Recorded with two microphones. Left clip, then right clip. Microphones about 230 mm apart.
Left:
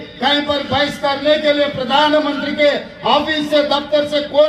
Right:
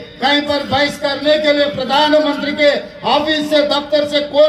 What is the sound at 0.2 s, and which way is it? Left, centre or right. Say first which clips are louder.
A man's voice: right 1 dB; right.